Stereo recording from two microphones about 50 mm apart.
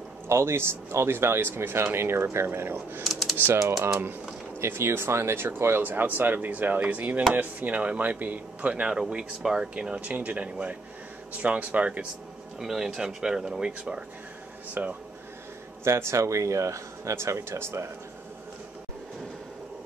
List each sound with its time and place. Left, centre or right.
0.3 s speech: right
3.1 s typing: centre
3.3 s speech: right
5.8 s speech: right
9.4 s speech: centre
9.8 s speech: right
12.5 s speech: centre
14.7 s speech: right
15.8 s speech: right